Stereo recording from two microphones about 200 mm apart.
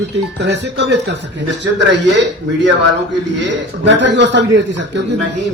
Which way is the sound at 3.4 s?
60° right (ahead or behind).